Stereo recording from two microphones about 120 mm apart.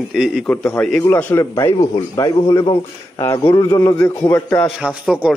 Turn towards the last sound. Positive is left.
turn(degrees=-10)  # may be behind; listen again after turning